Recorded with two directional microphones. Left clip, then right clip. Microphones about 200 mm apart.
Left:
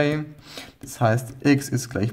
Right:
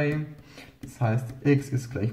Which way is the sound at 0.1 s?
45° left (ahead or behind).